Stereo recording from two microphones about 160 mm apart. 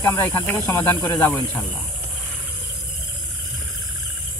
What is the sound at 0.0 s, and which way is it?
Speech, 15° left (ahead or behind).